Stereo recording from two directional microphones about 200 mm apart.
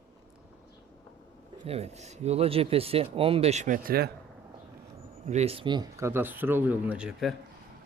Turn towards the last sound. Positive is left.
turn(degrees=-5)  # may be behind; listen again after turning